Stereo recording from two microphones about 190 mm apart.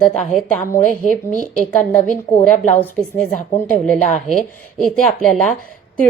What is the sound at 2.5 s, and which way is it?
Speech, 40° left (ahead or behind).